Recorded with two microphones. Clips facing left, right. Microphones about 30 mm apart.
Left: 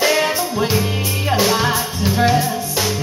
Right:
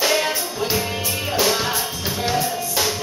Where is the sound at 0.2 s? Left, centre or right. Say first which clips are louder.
Left 5 dB; left; by 2.9 s centre.